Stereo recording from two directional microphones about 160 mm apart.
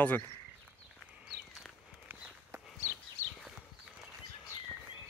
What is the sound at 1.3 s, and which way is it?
Walk, centre (ahead or behind).